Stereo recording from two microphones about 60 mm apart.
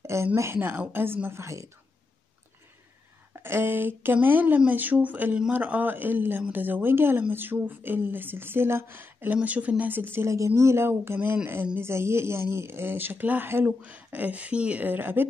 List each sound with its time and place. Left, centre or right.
0.0 s a sound: right
0.6 s speech: right
1.4 s speech: right
3.3 s speech: right
10.2 s speech: right
13.7 s speech: right